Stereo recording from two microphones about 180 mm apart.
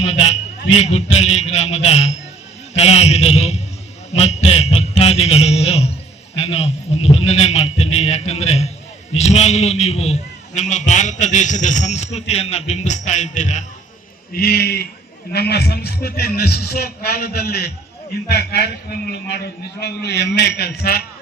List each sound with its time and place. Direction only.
0.0 s a sound: 35° left (ahead or behind)
0.8 s a man's voice: 35° left (ahead or behind)
14.3 s a man's voice: 60° left (ahead or behind)